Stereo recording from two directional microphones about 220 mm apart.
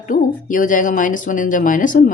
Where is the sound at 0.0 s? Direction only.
40° left (ahead or behind).